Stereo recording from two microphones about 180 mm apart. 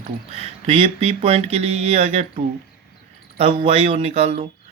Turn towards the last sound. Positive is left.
turn(degrees=-35)  # may be behind; listen again after turning